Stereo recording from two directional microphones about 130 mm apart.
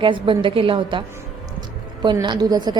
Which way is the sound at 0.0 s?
40° right (ahead or behind).